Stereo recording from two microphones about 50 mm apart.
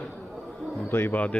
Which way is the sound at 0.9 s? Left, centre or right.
Left.